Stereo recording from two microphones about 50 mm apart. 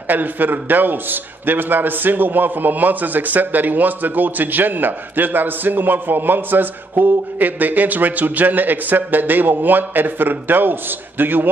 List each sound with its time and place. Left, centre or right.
0.1 s a man's voice: right